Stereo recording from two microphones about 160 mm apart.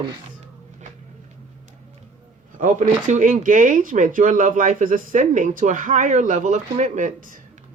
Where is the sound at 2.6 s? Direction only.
50° right (ahead or behind).